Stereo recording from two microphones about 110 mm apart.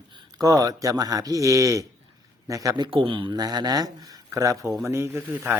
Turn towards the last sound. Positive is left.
turn(degrees=-25)  # may be behind; listen again after turning